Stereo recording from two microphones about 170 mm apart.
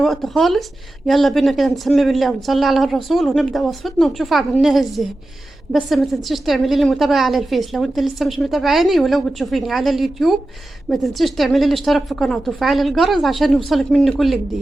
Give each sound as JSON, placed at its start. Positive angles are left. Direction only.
{"t": 0.0, "sound": "a woman's voice", "side_deg": 0}